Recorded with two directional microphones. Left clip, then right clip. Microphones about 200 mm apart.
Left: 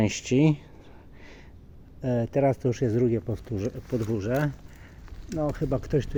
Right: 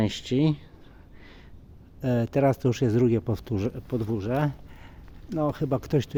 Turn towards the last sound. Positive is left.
turn(degrees=-20)  # may be behind; listen again after turning